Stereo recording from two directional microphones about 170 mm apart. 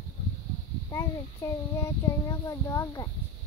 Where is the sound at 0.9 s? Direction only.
15° left (ahead or behind).